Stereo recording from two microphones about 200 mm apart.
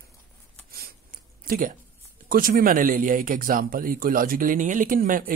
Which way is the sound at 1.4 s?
45° right (ahead or behind).